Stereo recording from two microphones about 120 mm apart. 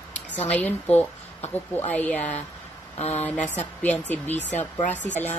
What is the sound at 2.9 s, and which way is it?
Speech, 65° left (ahead or behind).